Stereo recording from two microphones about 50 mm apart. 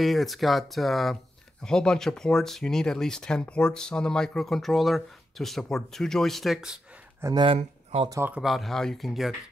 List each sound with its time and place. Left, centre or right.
0.0 s speech: centre
1.6 s speech: centre
7.2 s speech: right
8.4 s speech: centre